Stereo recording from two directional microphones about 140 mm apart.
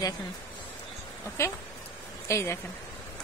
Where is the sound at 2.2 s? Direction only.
20° left (ahead or behind).